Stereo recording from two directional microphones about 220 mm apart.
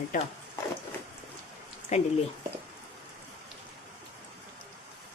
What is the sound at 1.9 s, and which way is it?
Speech, 30° left (ahead or behind).